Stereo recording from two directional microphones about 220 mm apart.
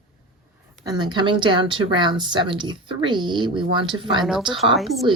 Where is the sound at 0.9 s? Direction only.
20° right (ahead or behind).